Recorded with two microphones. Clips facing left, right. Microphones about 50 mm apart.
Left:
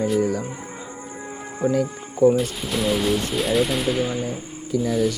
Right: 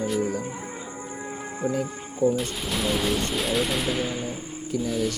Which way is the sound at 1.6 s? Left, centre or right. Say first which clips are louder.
Left 6 dB; left.